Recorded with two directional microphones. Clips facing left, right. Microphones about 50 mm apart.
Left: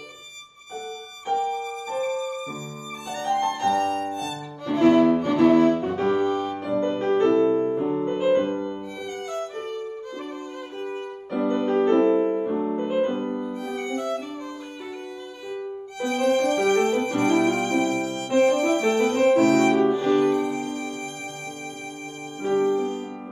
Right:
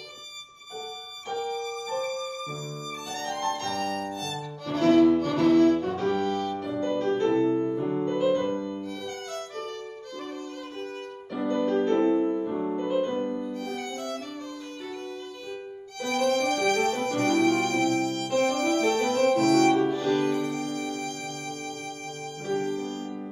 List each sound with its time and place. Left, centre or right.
1.2 s music: left
3.1 s violin: left
6.5 s music: left
9.3 s violin: centre
11.3 s music: left
16.0 s violin: left
16.9 s music: left
22.4 s music: left